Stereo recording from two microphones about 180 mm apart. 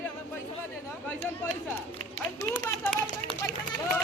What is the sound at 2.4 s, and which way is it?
Speech, 15° left (ahead or behind).